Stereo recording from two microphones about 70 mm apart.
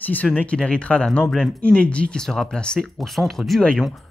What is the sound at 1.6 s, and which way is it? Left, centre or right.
Speech, centre.